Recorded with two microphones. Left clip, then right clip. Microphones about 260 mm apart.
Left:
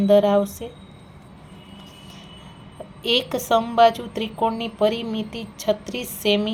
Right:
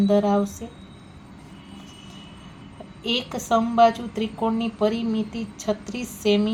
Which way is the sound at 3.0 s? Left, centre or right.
Left.